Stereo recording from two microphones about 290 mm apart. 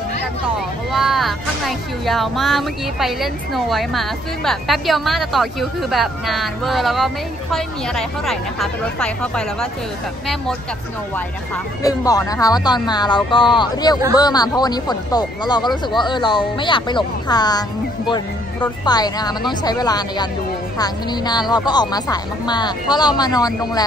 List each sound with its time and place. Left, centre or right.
0.9 s speech: centre
11.1 s a woman's voice: centre